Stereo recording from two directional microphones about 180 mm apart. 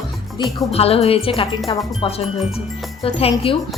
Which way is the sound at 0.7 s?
35° left (ahead or behind).